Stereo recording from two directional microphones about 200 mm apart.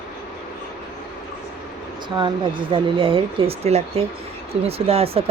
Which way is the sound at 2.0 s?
25° right (ahead or behind).